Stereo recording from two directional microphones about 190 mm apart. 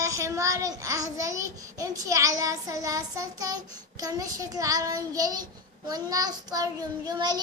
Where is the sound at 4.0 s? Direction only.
20° right (ahead or behind).